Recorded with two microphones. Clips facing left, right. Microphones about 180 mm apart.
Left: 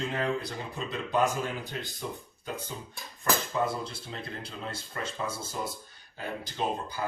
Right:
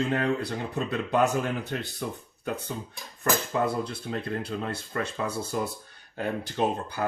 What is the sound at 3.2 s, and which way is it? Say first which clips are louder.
Speech: right 3 dB; 60° right (ahead or behind).